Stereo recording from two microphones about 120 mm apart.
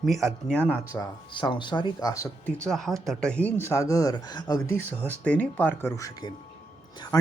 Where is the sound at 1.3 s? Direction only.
40° left (ahead or behind).